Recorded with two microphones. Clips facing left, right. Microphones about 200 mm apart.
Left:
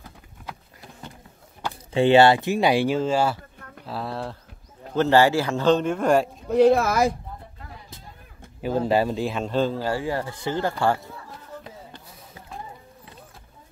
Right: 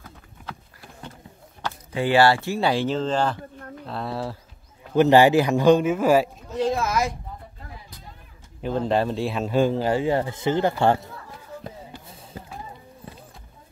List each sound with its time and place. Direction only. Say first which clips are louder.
1.9 s speech: left 3 dB; 25° left (ahead or behind); by 4.4 s centre (ahead or behind)
4.9 s speech: right 3 dB; 15° right (ahead or behind)
6.5 s speech: left 7 dB; 60° left (ahead or behind)
8.5 s speech: left 1 dB; 5° left (ahead or behind); by 10.7 s 20° right (ahead or behind)